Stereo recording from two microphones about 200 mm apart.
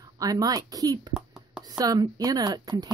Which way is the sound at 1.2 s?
5° right (ahead or behind).